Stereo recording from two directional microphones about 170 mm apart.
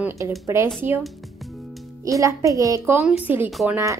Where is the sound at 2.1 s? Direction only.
20° right (ahead or behind).